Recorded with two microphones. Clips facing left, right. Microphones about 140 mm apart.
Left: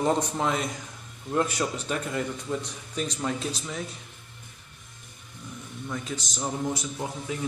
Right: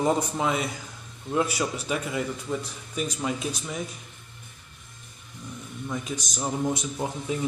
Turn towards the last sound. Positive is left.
turn(degrees=-20)  # may be behind; listen again after turning